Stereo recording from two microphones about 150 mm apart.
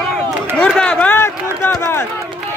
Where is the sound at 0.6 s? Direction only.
5° left (ahead or behind).